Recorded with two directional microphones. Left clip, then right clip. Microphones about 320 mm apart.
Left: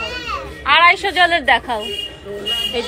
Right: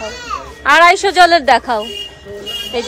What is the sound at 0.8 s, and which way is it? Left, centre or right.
Speech, right.